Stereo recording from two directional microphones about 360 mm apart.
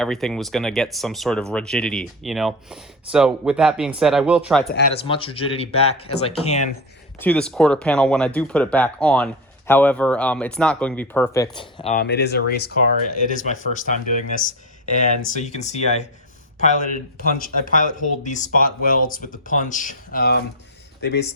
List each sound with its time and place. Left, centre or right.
0.0 s speech: centre
5.0 s speech: centre
7.2 s speech: centre; by 21.2 s left